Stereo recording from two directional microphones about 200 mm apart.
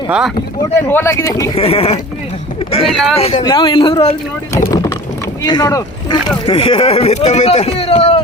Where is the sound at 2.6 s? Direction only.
30° left (ahead or behind).